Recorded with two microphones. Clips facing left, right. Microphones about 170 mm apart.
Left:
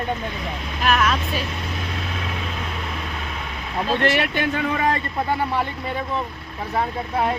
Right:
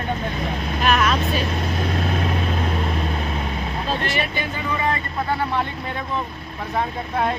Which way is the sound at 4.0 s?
70° left (ahead or behind).